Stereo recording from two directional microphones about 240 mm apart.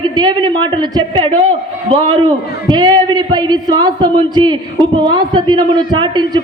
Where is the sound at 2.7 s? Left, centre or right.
Centre.